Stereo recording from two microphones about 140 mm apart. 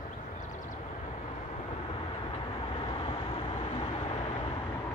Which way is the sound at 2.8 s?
40° left (ahead or behind).